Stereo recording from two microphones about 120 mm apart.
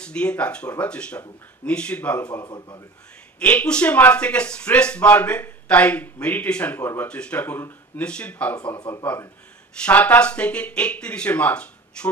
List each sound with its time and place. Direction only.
0.0 s speech: 10° left (ahead or behind)
2.3 s a man's voice: 35° left (ahead or behind)
3.3 s speech: 10° left (ahead or behind)
8.7 s a man's voice: 30° left (ahead or behind)
9.8 s speech: 10° left (ahead or behind)